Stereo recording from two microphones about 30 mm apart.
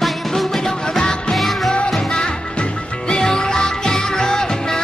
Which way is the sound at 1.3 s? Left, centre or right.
Centre.